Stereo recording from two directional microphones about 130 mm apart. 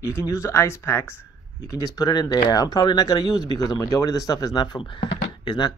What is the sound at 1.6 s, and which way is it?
Speech, 30° left (ahead or behind).